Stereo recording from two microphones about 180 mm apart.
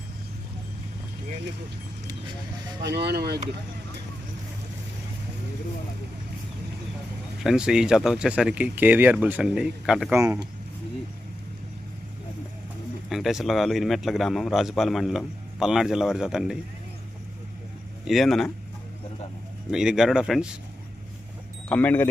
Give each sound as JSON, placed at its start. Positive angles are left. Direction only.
{"t": 2.8, "sound": "speech", "side_deg": -65}
{"t": 7.4, "sound": "speech", "side_deg": -5}
{"t": 13.1, "sound": "speech", "side_deg": 0}
{"t": 18.0, "sound": "speech", "side_deg": 0}
{"t": 19.7, "sound": "speech", "side_deg": -5}
{"t": 21.7, "sound": "speech", "side_deg": 10}